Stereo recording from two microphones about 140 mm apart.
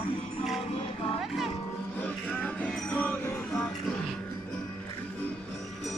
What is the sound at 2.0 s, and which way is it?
Music, 10° left (ahead or behind).